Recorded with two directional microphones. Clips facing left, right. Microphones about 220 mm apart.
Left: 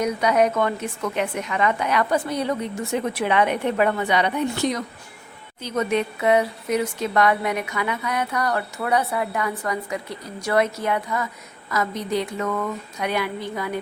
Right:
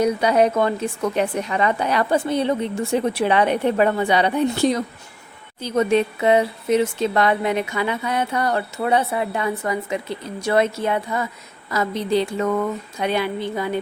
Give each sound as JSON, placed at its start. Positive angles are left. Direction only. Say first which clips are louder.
{"t": 0.0, "sound": "a woman's voice", "louder": "right 3 dB", "side_deg": -30}